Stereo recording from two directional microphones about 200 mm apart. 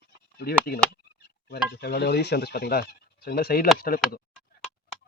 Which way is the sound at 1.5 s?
55° left (ahead or behind).